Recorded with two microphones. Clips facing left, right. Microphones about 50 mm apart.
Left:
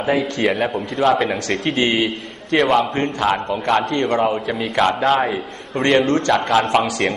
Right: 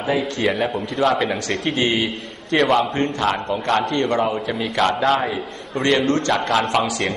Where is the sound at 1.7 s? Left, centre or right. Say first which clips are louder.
Left 2 dB; left.